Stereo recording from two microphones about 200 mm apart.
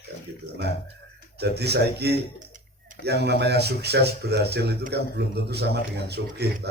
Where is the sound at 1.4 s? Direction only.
55° right (ahead or behind).